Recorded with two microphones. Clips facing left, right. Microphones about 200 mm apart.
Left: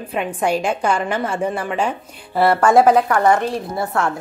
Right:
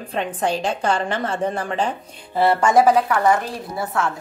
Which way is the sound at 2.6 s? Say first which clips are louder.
Left 3 dB; 60° left (ahead or behind).